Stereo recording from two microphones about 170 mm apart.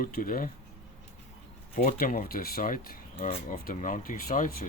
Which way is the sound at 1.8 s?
55° left (ahead or behind).